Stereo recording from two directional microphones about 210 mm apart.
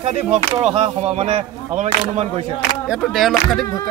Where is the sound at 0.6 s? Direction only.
30° right (ahead or behind).